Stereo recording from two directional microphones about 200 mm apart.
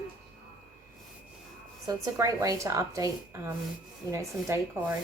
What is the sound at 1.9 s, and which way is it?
Speech, 15° right (ahead or behind).